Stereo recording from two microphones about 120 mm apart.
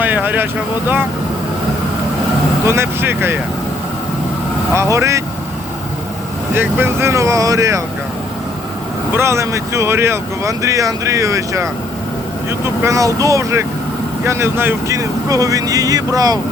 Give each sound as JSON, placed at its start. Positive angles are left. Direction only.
{"t": 0.0, "sound": "speech", "side_deg": -15}
{"t": 2.6, "sound": "speech", "side_deg": -20}
{"t": 4.7, "sound": "speech", "side_deg": -25}
{"t": 6.5, "sound": "speech", "side_deg": -20}
{"t": 9.1, "sound": "speech", "side_deg": -20}